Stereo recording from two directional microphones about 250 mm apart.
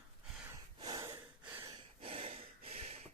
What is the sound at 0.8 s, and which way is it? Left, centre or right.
Snort, centre.